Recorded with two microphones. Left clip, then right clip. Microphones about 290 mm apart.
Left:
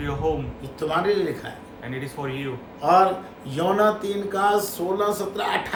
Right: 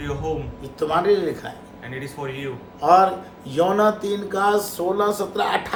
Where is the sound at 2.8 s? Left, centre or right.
Centre.